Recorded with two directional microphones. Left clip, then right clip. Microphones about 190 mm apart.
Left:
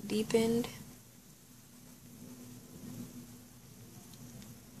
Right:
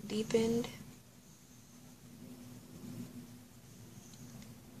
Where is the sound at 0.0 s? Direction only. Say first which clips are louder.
Left 2 dB; 30° left (ahead or behind).